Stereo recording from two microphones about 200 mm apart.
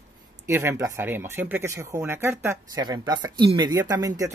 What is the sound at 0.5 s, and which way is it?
Speech, 10° right (ahead or behind).